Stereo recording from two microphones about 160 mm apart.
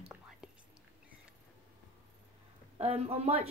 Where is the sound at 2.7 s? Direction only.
40° right (ahead or behind).